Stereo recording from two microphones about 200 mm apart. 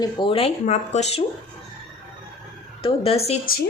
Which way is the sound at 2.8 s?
30° left (ahead or behind).